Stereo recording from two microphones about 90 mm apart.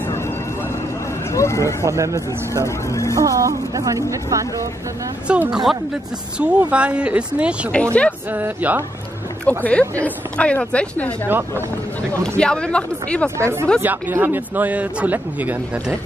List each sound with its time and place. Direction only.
1.3 s speech: 35° left (ahead or behind)
1.9 s speech: 35° right (ahead or behind)
2.6 s speech: 35° left (ahead or behind)
3.2 s speech: 35° right (ahead or behind)
5.3 s speech: 10° right (ahead or behind)
7.7 s a woman's voice: 15° left (ahead or behind)
8.3 s speech: 20° right (ahead or behind)
9.4 s a woman's voice: 15° left (ahead or behind)
12.2 s a woman's voice: 10° left (ahead or behind)
13.4 s speech: 30° right (ahead or behind)
13.7 s speech: 20° right (ahead or behind)